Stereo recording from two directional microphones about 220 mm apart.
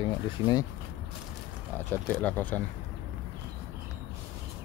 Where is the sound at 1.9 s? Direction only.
10° left (ahead or behind).